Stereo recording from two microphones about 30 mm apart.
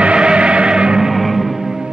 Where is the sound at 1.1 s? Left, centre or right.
Centre.